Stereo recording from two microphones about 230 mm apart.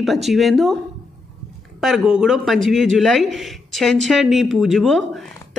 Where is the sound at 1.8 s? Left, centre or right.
Centre.